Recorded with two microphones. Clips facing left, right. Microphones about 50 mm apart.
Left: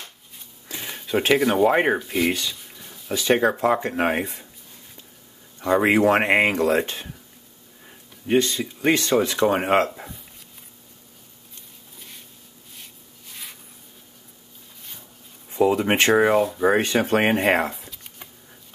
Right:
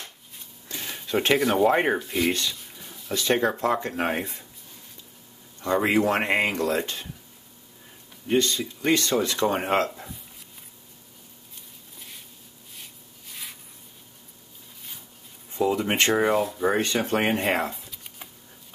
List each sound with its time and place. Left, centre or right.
0.7 s speech: centre
3.1 s speech: centre
5.6 s speech: centre
12.7 s rub: centre
15.5 s speech: left
16.2 s speech: centre
16.6 s speech: left
17.4 s a sound: centre